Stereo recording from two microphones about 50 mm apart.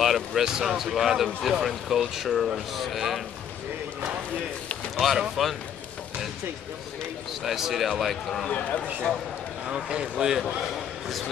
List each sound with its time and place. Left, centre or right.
0.0 s speech: centre
4.9 s speech: centre
7.4 s speech: centre
8.5 s speech: left
9.7 s speech: centre